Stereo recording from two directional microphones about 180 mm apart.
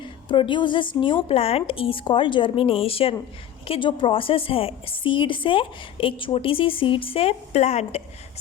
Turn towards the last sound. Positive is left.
turn(degrees=35)  # may be behind; listen again after turning